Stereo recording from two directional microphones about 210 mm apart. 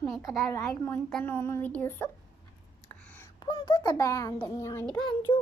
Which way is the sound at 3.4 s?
20° left (ahead or behind).